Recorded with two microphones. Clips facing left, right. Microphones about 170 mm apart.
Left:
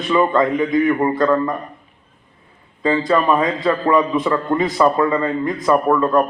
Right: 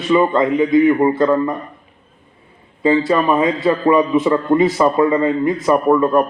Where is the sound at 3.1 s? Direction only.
25° right (ahead or behind).